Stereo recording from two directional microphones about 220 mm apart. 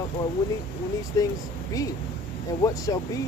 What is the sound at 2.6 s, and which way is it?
Speech, 15° left (ahead or behind).